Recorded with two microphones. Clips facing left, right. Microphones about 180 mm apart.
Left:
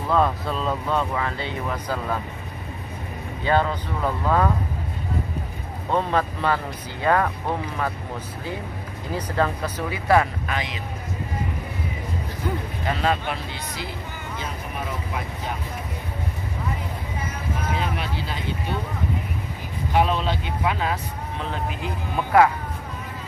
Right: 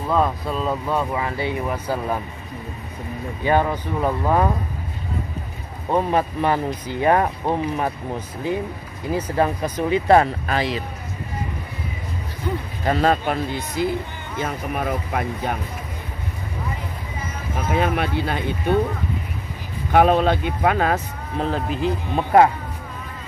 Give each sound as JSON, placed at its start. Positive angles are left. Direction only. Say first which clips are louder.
{"t": 0.1, "sound": "speech", "louder": "right 1 dB", "side_deg": -5}
{"t": 3.4, "sound": "speech", "louder": "right 2 dB", "side_deg": -15}
{"t": 5.9, "sound": "speech", "louder": "right 3 dB", "side_deg": -15}
{"t": 9.4, "sound": "speech", "louder": "right 3 dB", "side_deg": -20}
{"t": 12.8, "sound": "speech", "louder": "right 5 dB", "side_deg": -40}
{"t": 17.7, "sound": "speech", "louder": "right 7 dB", "side_deg": -55}
{"t": 19.9, "sound": "speech", "louder": "right 6 dB", "side_deg": -55}